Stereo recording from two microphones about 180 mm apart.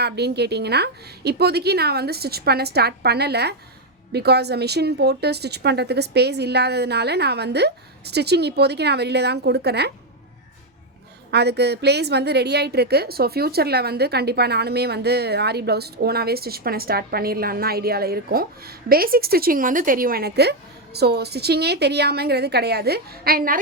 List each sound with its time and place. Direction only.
0.0 s a woman's voice: 65° right (ahead or behind)
11.3 s a woman's voice: 65° right (ahead or behind)